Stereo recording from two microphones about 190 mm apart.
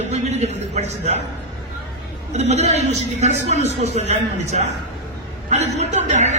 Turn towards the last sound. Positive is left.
turn(degrees=-35)  # may be behind; listen again after turning